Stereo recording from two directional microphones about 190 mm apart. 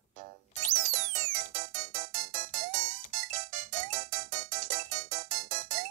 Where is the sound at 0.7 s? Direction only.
40° right (ahead or behind).